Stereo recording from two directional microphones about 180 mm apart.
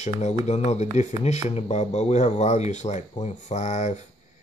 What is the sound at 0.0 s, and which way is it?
Speech, 40° left (ahead or behind).